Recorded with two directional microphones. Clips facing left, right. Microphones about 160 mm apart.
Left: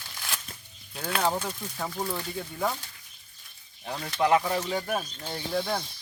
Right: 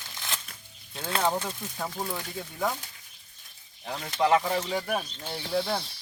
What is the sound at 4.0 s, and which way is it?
Speech, 20° right (ahead or behind).